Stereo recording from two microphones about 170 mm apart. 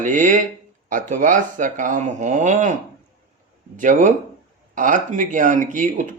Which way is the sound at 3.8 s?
50° right (ahead or behind).